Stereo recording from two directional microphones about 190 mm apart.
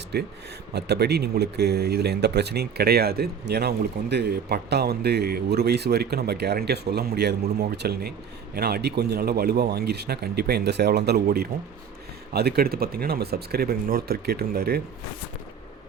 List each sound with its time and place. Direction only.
0.1 s speech: 60° right (ahead or behind)